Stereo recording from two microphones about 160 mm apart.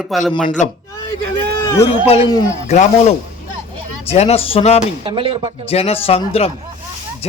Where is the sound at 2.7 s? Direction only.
45° left (ahead or behind).